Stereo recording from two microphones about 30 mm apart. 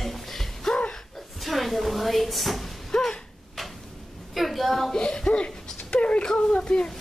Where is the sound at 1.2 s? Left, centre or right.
Centre.